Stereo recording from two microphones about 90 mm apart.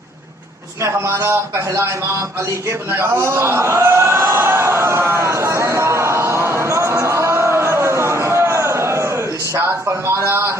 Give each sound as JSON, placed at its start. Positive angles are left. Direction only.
{"t": 0.8, "sound": "a man's voice", "side_deg": -30}
{"t": 2.6, "sound": "a sound", "side_deg": -30}
{"t": 9.6, "sound": "a man's voice", "side_deg": -30}